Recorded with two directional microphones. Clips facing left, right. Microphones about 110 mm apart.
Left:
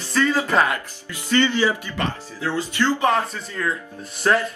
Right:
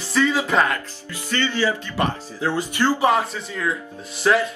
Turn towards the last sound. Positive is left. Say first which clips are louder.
# right 1 dB
turn(degrees=-5)  # may be behind; listen again after turning